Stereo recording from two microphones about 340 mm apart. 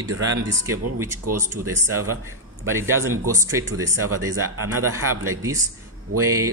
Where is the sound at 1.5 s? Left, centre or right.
Right.